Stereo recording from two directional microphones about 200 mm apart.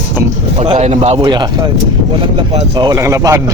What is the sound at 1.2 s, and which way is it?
Speech, 20° right (ahead or behind).